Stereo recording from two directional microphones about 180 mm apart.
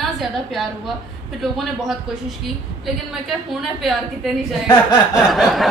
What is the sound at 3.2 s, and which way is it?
Speech, centre (ahead or behind).